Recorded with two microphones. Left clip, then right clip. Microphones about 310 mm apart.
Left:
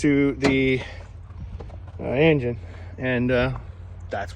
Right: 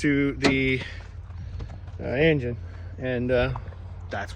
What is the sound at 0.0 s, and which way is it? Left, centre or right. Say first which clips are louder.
Speech: left 3 dB; centre.